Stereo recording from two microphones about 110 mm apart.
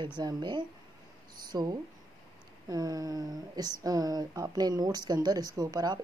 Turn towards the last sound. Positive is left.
turn(degrees=-40)  # may be behind; listen again after turning